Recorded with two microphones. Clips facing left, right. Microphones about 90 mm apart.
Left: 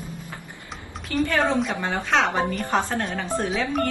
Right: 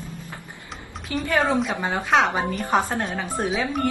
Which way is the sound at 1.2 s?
15° right (ahead or behind).